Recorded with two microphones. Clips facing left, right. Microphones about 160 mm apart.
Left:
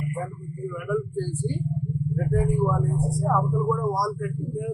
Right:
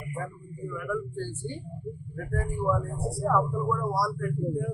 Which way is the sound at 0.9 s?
10° left (ahead or behind).